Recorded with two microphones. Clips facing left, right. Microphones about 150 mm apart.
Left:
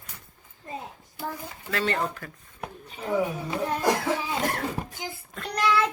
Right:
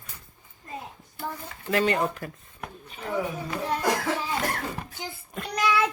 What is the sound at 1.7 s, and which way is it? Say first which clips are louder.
Speech: right 4 dB; 15° right (ahead or behind).